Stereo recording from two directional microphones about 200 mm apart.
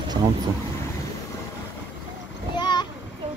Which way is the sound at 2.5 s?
20° left (ahead or behind).